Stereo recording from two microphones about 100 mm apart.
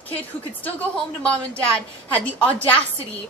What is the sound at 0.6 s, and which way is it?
A woman's voice, 15° left (ahead or behind).